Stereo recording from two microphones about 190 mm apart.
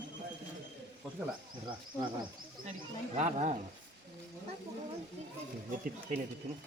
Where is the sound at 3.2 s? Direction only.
35° right (ahead or behind).